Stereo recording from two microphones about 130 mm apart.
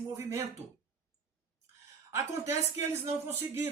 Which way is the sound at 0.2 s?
20° right (ahead or behind).